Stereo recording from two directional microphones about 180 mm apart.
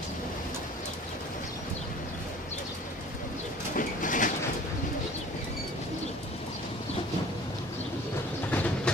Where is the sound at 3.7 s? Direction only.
45° left (ahead or behind).